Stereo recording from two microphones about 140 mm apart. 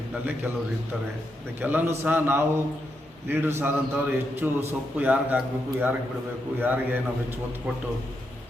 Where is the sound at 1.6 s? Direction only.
15° right (ahead or behind).